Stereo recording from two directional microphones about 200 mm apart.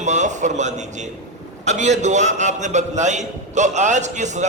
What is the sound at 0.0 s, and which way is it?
A man's voice, 35° right (ahead or behind).